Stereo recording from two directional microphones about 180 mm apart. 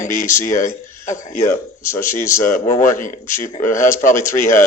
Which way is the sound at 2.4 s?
45° left (ahead or behind).